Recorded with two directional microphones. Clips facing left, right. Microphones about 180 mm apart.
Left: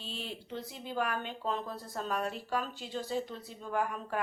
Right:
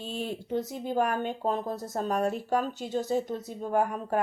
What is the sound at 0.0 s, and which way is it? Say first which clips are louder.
Speech: right 8 dB; 50° right (ahead or behind).